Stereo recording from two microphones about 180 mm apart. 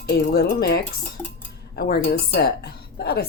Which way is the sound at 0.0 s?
60° left (ahead or behind).